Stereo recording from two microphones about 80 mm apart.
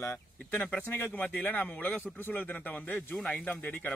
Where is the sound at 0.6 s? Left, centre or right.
Left.